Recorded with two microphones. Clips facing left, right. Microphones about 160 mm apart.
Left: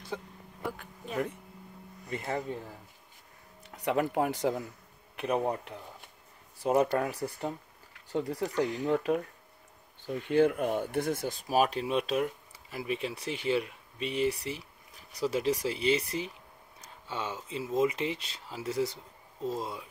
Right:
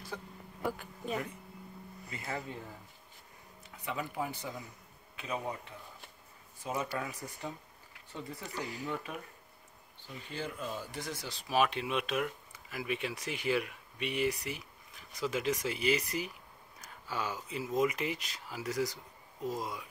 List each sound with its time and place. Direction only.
0.1 s a sound: 15° left (ahead or behind)
0.6 s a sound: centre (ahead or behind)
3.6 s speech: 70° left (ahead or behind)
5.1 s speech: 60° left (ahead or behind)
8.1 s speech: 75° left (ahead or behind)
8.5 s speech: 5° right (ahead or behind)
8.8 s speech: 55° left (ahead or behind); by 19.9 s 30° left (ahead or behind)